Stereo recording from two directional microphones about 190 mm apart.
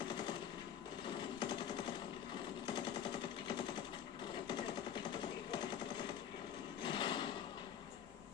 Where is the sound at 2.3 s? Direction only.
25° left (ahead or behind).